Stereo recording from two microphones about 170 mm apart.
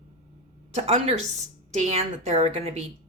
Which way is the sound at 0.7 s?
40° right (ahead or behind).